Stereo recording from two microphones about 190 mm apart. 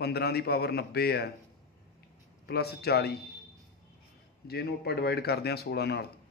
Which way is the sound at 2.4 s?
55° left (ahead or behind).